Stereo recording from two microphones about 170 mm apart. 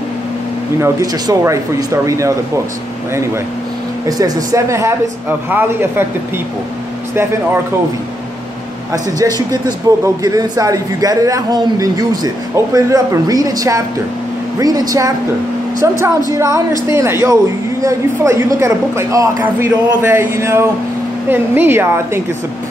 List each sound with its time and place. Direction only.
0.7 s speech: 15° right (ahead or behind)
4.2 s speech: 20° right (ahead or behind)
8.9 s a man's voice: 20° right (ahead or behind)